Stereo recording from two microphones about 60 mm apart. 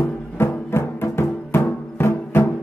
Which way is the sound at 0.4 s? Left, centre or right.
Left.